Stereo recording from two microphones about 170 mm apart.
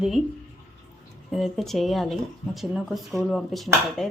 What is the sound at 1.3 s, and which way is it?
Speech, centre (ahead or behind).